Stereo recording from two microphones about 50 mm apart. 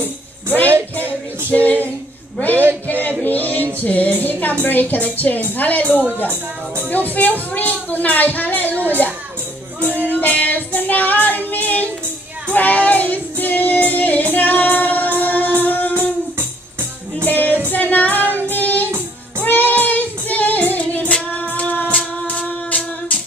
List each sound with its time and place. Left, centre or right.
0.7 s music: right
2.5 s a sound: right
3.3 s music: left
3.8 s a woman's voice: left
9.9 s child singing: left
14.3 s music: left
17.2 s music: left
18.3 s child singing: left
21.8 s music: left